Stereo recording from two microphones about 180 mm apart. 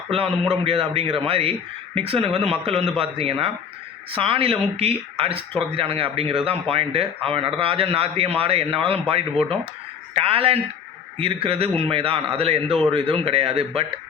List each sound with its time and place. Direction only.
0.5 s speech: 30° right (ahead or behind)